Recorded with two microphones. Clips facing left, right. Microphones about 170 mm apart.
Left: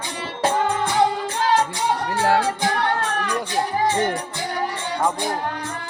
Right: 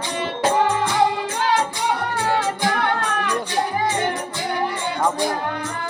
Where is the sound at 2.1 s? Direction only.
90° left.